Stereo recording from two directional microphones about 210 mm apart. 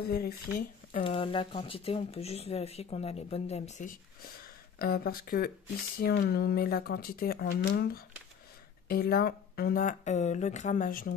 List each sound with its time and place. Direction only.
0.0 s speech: 45° left (ahead or behind)
1.0 s speech: 25° left (ahead or behind); by 11.1 s 40° left (ahead or behind)